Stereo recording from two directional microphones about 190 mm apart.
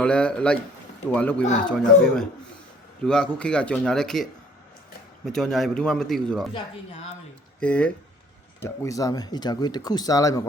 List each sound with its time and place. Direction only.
0.0 s a man's voice: 5° left (ahead or behind)
7.6 s speech: 5° left (ahead or behind)